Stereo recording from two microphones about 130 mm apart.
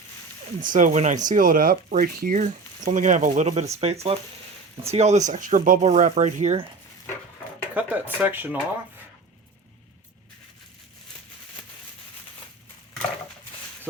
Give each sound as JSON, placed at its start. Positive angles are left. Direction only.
{"t": 0.6, "sound": "speech", "side_deg": -90}
{"t": 7.7, "sound": "speech", "side_deg": -10}